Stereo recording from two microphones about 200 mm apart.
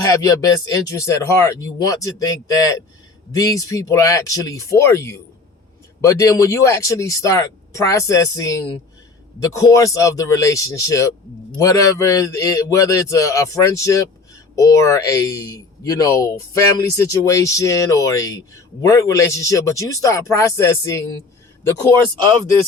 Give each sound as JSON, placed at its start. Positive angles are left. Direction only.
{"t": 0.0, "sound": "speech", "side_deg": 20}